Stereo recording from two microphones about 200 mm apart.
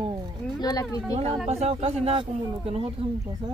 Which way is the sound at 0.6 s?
20° left (ahead or behind).